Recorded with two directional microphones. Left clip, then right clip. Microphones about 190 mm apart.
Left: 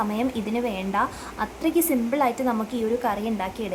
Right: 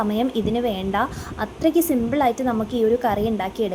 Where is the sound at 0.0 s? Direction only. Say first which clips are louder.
Right 4 dB; 15° right (ahead or behind).